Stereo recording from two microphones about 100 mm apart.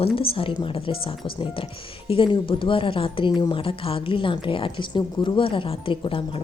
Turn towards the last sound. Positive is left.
turn(degrees=60)  # may be behind; listen again after turning